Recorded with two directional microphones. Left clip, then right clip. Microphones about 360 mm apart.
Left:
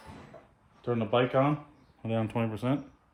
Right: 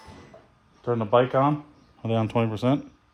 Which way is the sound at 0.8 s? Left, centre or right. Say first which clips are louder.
Right 6 dB; centre.